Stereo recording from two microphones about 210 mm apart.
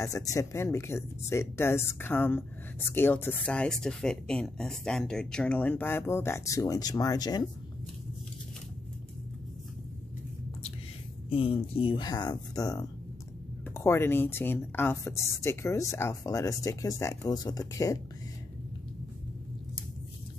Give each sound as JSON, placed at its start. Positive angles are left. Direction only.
{"t": 0.0, "sound": "speech", "side_deg": 15}
{"t": 11.2, "sound": "speech", "side_deg": 25}